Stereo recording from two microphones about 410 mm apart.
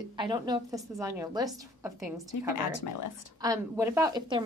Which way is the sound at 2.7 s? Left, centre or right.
Left.